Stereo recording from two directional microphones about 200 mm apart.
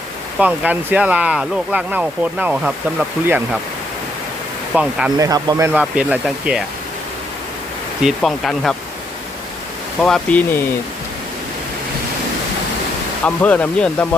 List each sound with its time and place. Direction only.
0.3 s speech: 5° right (ahead or behind)
4.7 s speech: 5° right (ahead or behind)
5.1 s speech: 20° right (ahead or behind)
5.8 s speech: centre (ahead or behind)
8.0 s speech: centre (ahead or behind)
10.0 s speech: 5° left (ahead or behind)
13.2 s speech: 5° left (ahead or behind)